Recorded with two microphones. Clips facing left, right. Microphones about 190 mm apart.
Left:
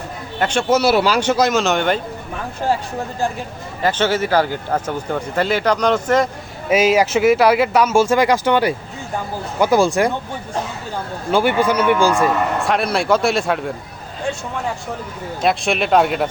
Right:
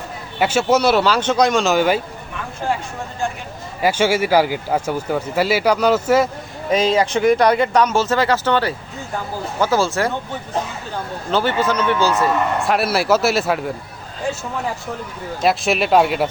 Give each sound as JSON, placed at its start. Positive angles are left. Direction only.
{"t": 0.3, "sound": "a man's voice", "side_deg": -5}
{"t": 3.8, "sound": "speech", "side_deg": -10}
{"t": 6.7, "sound": "speech", "side_deg": 10}
{"t": 11.3, "sound": "speech", "side_deg": 10}
{"t": 12.5, "sound": "a man's voice", "side_deg": 0}
{"t": 15.4, "sound": "a man's voice", "side_deg": 0}